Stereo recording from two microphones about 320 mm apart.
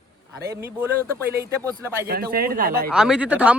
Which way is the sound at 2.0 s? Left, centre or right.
Right.